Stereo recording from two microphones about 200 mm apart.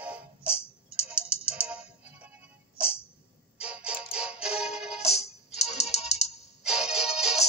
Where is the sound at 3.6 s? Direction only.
5° right (ahead or behind).